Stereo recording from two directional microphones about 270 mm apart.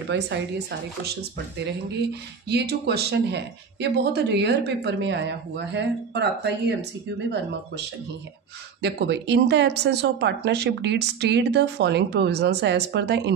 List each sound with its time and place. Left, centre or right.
0.1 s speech: right
2.4 s speech: right
8.8 s speech: right